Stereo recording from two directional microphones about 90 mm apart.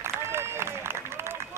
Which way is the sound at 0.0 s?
30° right (ahead or behind).